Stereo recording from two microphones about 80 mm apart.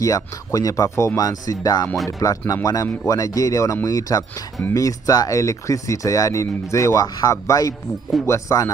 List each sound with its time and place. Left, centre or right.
0.0 s speech: left